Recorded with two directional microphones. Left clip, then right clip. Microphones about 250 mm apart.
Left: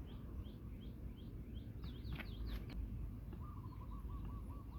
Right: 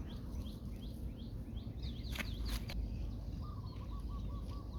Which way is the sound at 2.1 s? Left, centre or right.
Right.